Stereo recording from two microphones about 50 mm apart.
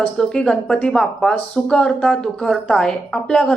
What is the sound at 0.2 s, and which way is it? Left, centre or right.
Speech, centre.